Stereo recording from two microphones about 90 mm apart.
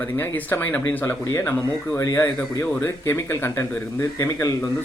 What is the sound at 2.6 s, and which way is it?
Speech, 20° left (ahead or behind).